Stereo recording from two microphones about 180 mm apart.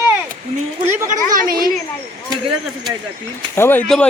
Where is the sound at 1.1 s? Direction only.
50° right (ahead or behind).